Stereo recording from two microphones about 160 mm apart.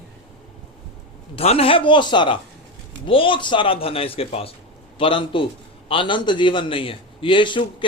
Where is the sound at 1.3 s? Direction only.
40° left (ahead or behind).